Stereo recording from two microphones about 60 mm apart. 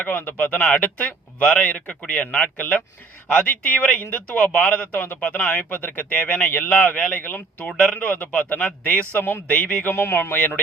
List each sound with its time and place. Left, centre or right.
0.0 s speech: left
4.9 s a man's voice: left
5.2 s speech: left
7.7 s speech: centre
7.9 s speech: left
9.8 s a man's voice: left